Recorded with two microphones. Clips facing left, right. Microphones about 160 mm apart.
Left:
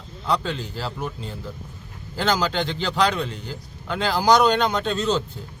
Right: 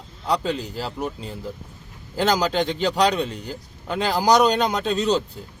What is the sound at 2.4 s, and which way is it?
Speech, 40° right (ahead or behind).